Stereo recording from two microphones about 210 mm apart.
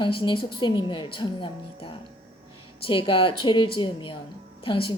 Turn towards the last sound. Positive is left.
turn(degrees=25)  # may be behind; listen again after turning